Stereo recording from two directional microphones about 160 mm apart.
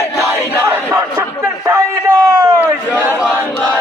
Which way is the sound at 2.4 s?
10° right (ahead or behind).